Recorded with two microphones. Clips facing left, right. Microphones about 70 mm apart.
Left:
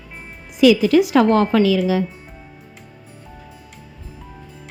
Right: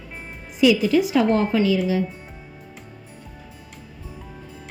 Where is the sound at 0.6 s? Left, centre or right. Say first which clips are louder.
Left 4 dB; left.